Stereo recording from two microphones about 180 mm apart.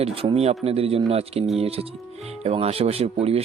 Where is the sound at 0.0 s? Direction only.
30° right (ahead or behind).